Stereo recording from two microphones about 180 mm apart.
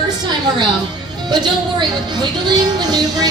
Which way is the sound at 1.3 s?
25° right (ahead or behind).